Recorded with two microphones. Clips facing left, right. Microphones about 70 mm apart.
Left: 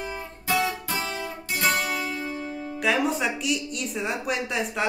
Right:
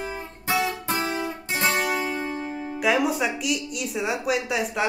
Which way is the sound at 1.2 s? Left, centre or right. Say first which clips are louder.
Right 1 dB; right.